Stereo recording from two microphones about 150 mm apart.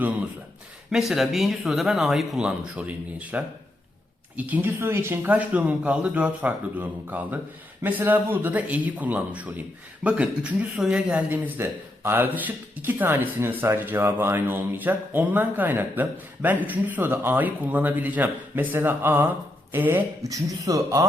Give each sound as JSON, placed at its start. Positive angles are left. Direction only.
{"t": 0.9, "sound": "a man's voice", "side_deg": -5}